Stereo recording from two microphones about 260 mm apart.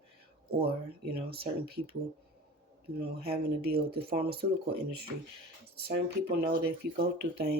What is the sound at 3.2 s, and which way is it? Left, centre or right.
Speech, right.